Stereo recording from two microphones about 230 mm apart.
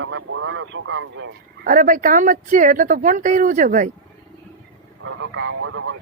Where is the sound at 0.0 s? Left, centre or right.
Right.